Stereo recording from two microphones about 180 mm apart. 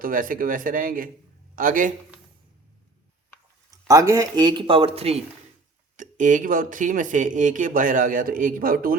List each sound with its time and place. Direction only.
0.0 s speech: 50° right (ahead or behind)
3.7 s speech: 20° right (ahead or behind); by 5.2 s 35° right (ahead or behind)
6.0 s speech: 45° right (ahead or behind)